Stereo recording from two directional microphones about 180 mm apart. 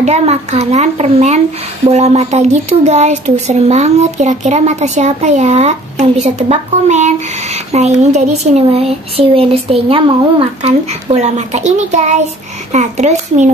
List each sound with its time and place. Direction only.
0.0 s speech: 35° right (ahead or behind)